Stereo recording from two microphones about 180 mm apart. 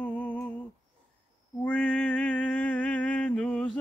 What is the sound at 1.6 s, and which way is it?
Mantra, 10° left (ahead or behind).